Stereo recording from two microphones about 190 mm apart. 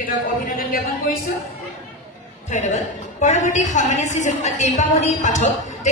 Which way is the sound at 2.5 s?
40° left (ahead or behind).